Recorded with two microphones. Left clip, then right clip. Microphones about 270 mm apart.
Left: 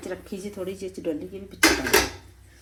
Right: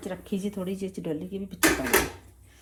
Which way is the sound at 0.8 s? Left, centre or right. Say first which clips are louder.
Left 4 dB; right.